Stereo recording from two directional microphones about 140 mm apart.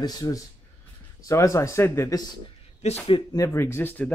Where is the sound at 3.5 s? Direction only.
15° left (ahead or behind).